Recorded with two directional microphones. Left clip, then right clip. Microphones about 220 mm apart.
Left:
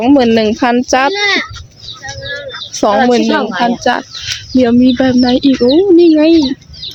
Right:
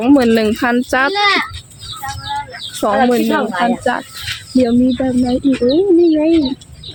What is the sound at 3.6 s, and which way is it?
A woman's voice, 10° left (ahead or behind).